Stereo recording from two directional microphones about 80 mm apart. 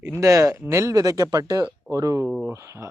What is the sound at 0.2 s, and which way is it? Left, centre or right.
Speech, right.